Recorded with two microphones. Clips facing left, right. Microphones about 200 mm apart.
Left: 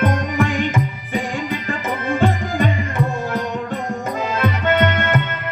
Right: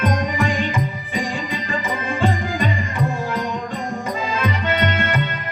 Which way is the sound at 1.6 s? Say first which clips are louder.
Left 2 dB; 60° left (ahead or behind).